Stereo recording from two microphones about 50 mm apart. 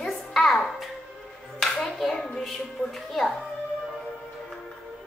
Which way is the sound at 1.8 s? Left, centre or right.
Centre.